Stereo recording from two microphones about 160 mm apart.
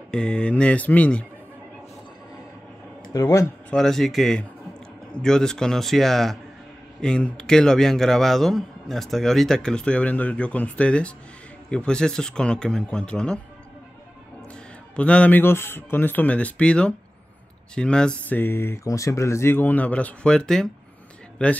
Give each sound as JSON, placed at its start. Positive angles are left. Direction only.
{"t": 0.1, "sound": "speech", "side_deg": 5}
{"t": 3.1, "sound": "speech", "side_deg": 20}
{"t": 3.7, "sound": "speech", "side_deg": 0}
{"t": 14.5, "sound": "speech", "side_deg": 5}